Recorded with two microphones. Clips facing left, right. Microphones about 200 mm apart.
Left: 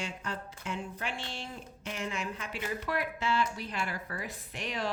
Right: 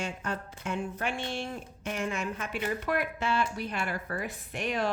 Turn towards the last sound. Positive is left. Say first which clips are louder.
# right 5 dB
turn(degrees=-55)  # may be behind; listen again after turning